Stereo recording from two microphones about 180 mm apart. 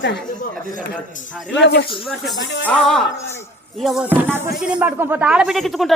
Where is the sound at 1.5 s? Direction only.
75° left (ahead or behind).